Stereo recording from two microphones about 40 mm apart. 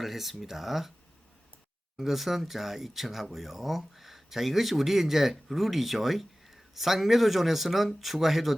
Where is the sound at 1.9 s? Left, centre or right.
Centre.